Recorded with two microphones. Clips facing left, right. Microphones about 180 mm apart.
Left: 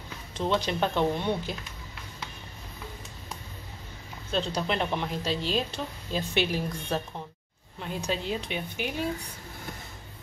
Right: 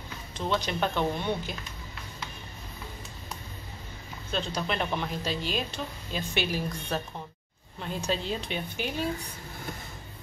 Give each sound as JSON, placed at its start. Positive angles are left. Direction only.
{"t": 0.3, "sound": "speech", "side_deg": 25}
{"t": 4.3, "sound": "speech", "side_deg": 30}
{"t": 7.8, "sound": "a woman's voice", "side_deg": 10}